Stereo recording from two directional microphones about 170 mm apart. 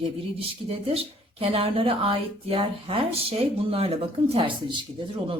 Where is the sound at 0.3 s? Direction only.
35° right (ahead or behind).